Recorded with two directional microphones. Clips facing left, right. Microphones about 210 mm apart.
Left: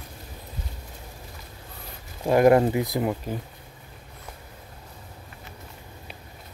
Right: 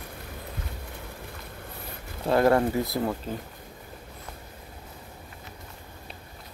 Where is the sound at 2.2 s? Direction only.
15° left (ahead or behind).